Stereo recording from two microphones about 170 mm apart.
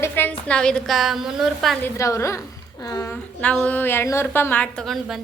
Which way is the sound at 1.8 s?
15° left (ahead or behind).